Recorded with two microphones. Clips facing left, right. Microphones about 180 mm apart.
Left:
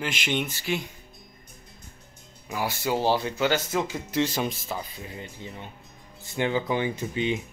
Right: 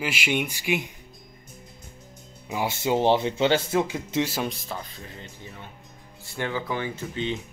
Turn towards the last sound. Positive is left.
turn(degrees=15)  # may be behind; listen again after turning